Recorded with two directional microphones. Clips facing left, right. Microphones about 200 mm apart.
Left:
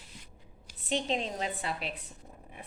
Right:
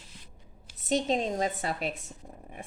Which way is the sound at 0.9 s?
40° right (ahead or behind).